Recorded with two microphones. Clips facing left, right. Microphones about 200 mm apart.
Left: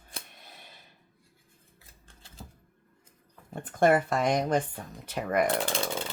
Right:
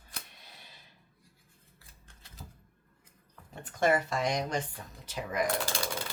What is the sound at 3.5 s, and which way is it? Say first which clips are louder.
Speech: left 5 dB; 50° left (ahead or behind).